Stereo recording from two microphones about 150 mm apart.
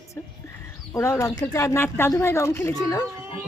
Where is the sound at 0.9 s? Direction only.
20° left (ahead or behind).